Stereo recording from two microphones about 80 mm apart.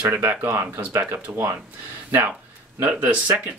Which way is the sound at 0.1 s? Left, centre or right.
Right.